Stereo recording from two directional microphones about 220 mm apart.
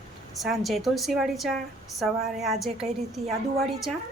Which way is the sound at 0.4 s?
Centre (ahead or behind).